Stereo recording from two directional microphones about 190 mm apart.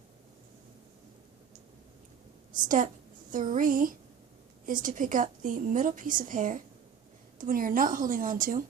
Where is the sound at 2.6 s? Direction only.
45° right (ahead or behind).